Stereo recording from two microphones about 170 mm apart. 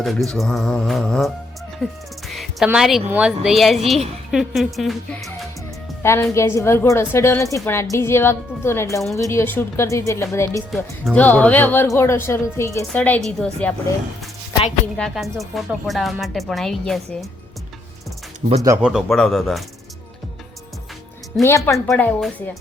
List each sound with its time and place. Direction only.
0.0 s speech: centre (ahead or behind)
1.8 s music: centre (ahead or behind)
2.6 s speech: 5° right (ahead or behind)
6.0 s a woman's voice: 15° left (ahead or behind)
14.9 s speech: centre (ahead or behind)
18.4 s speech: 40° right (ahead or behind)
18.8 s speech: 5° right (ahead or behind)
21.4 s a woman's voice: 15° left (ahead or behind)
21.8 s a woman's voice: 5° left (ahead or behind)